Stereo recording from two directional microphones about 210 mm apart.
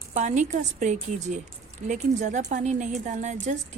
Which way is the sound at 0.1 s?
35° right (ahead or behind).